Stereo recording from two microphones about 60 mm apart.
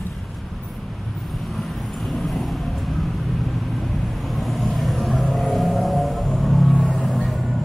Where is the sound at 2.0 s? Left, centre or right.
Centre.